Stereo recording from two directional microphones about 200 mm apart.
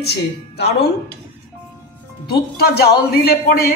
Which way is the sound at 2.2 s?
50° left (ahead or behind).